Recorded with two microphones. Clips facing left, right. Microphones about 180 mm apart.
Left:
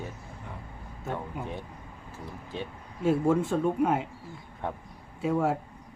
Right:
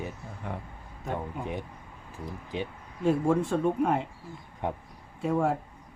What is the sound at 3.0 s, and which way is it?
Speech, centre (ahead or behind).